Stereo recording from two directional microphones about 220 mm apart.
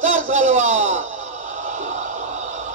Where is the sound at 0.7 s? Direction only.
60° right (ahead or behind).